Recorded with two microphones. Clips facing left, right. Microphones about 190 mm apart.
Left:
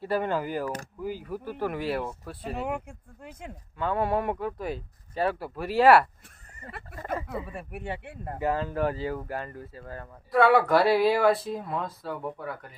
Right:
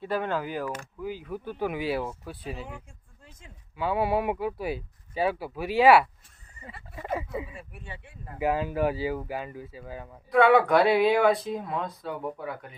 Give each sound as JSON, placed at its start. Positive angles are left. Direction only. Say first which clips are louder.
{"t": 0.0, "sound": "speech", "louder": "left 1 dB", "side_deg": 10}
{"t": 0.7, "sound": "speech", "louder": "left 1 dB", "side_deg": 45}
{"t": 1.2, "sound": "speech", "louder": "right 2 dB", "side_deg": 5}
{"t": 2.4, "sound": "speech", "louder": "left 8 dB", "side_deg": 60}
{"t": 3.8, "sound": "speech", "louder": "right 1 dB", "side_deg": -5}
{"t": 7.3, "sound": "speech", "louder": "even", "side_deg": 60}
{"t": 8.4, "sound": "speech", "louder": "right 1 dB", "side_deg": -10}